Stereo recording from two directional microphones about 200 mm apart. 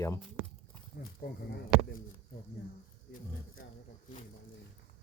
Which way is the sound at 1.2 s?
55° left (ahead or behind).